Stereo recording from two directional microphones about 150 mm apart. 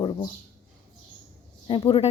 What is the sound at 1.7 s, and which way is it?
Speech, 35° left (ahead or behind).